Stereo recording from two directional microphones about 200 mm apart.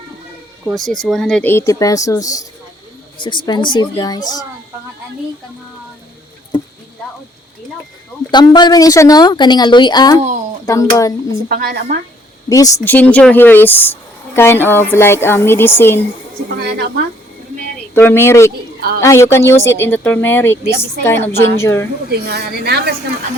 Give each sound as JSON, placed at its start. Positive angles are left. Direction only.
{"t": 0.6, "sound": "a woman's voice", "side_deg": 0}
{"t": 8.3, "sound": "a woman's voice", "side_deg": 20}
{"t": 10.2, "sound": "a sound", "side_deg": -40}
{"t": 10.7, "sound": "speech", "side_deg": 15}
{"t": 11.4, "sound": "a woman's voice", "side_deg": -50}
{"t": 12.5, "sound": "speech", "side_deg": 15}
{"t": 16.6, "sound": "a woman's voice", "side_deg": -55}
{"t": 17.9, "sound": "speech", "side_deg": 10}
{"t": 22.1, "sound": "a woman's voice", "side_deg": -50}